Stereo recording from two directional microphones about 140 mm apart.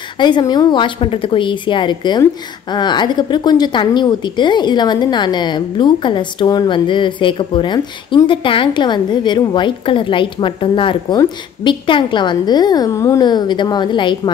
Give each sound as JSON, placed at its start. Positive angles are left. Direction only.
{"t": 0.2, "sound": "a woman's voice", "side_deg": 30}